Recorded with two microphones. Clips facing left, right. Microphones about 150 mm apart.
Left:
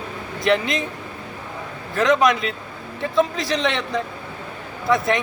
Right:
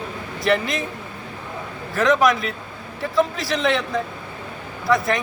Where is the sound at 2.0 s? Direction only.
Centre (ahead or behind).